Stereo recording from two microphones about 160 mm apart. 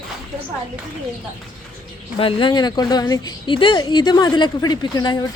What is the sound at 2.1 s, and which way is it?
A woman's voice, 35° left (ahead or behind).